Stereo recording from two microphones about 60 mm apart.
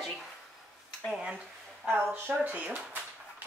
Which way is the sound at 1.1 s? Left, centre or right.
Centre.